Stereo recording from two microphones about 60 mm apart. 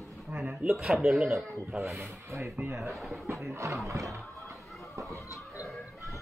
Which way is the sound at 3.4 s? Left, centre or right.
Right.